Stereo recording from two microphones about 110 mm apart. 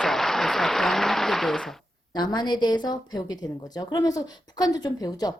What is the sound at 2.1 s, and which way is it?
Speech, 40° left (ahead or behind).